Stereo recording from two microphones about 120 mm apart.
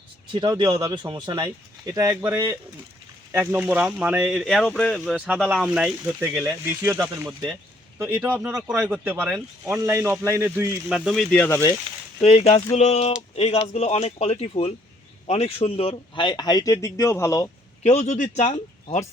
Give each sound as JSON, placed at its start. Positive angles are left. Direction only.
{"t": 0.3, "sound": "a man's voice", "side_deg": -40}
{"t": 8.1, "sound": "speech", "side_deg": -10}
{"t": 9.6, "sound": "a man's voice", "side_deg": -20}
{"t": 10.8, "sound": "speech", "side_deg": -5}
{"t": 11.3, "sound": "speech", "side_deg": 20}
{"t": 12.2, "sound": "speech", "side_deg": 60}
{"t": 17.8, "sound": "speech", "side_deg": 75}